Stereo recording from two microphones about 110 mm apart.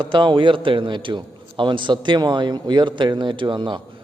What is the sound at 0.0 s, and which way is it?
A man's voice, 50° right (ahead or behind).